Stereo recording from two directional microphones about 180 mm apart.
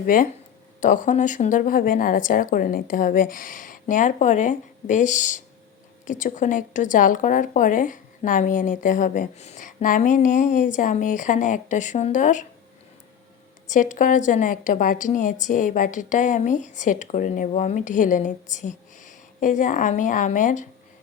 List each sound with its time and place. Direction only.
0.0 s a woman's voice: 50° left (ahead or behind)
13.7 s a woman's voice: 45° left (ahead or behind)